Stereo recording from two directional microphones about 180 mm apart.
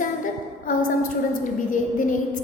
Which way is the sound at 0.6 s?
50° left (ahead or behind).